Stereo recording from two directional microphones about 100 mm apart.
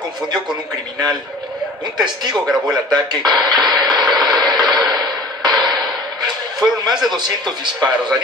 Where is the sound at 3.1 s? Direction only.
45° right (ahead or behind).